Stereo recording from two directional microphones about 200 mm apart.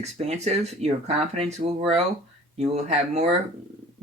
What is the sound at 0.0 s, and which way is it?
Speech, 35° right (ahead or behind).